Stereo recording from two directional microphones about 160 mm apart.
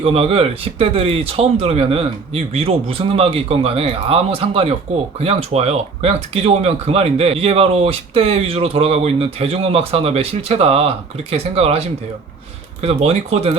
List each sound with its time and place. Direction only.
0.0 s speech: 35° right (ahead or behind)
12.8 s speech: 40° right (ahead or behind)